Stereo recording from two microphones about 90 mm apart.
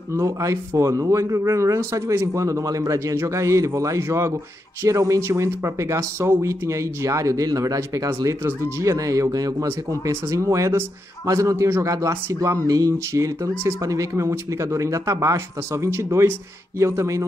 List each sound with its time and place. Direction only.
0.1 s speech: 40° right (ahead or behind)